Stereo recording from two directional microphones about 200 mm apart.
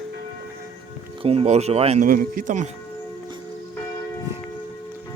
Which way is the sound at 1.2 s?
30° right (ahead or behind).